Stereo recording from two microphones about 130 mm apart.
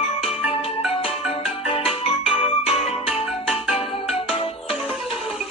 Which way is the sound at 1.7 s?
45° left (ahead or behind).